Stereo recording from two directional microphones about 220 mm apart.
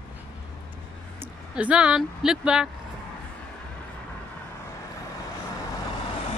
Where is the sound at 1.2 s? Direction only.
5° right (ahead or behind).